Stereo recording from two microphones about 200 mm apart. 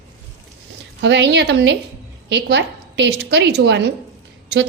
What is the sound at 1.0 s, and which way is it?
A woman's voice, 60° right (ahead or behind).